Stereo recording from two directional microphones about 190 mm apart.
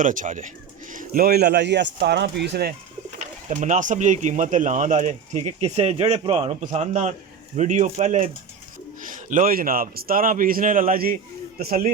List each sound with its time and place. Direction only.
0.0 s a man's voice: 45° right (ahead or behind); by 2.7 s 60° right (ahead or behind)
3.5 s a man's voice: 40° right (ahead or behind)